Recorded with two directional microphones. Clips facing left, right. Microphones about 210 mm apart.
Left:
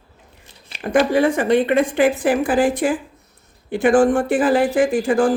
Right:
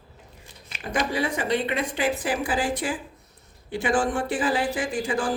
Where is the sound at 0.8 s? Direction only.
55° left (ahead or behind).